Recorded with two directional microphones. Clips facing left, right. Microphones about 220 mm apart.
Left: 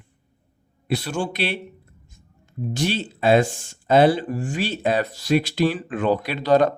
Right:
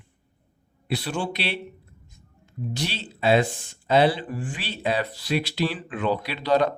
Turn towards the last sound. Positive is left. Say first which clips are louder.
# left 4 dB
turn(degrees=45)  # may be behind; listen again after turning